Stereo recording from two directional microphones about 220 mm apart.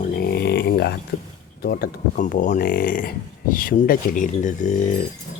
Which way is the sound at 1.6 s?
45° left (ahead or behind).